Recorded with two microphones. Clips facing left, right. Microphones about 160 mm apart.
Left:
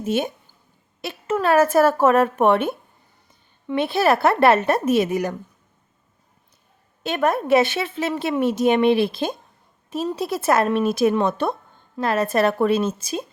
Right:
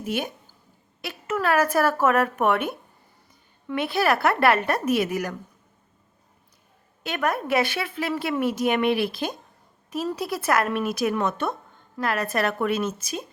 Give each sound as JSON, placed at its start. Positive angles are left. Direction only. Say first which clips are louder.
{"t": 0.0, "sound": "speech", "louder": "left 6 dB", "side_deg": 25}
{"t": 7.0, "sound": "speech", "louder": "left 5 dB", "side_deg": 25}